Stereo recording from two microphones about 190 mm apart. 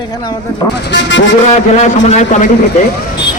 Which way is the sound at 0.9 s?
75° left (ahead or behind).